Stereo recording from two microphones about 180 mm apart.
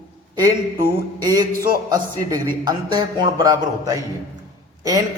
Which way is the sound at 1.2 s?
20° right (ahead or behind).